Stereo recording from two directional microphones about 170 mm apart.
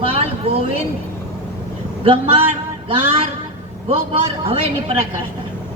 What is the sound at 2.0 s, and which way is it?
Speech, 35° right (ahead or behind).